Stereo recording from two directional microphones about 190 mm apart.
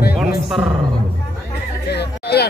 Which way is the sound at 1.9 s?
60° left (ahead or behind).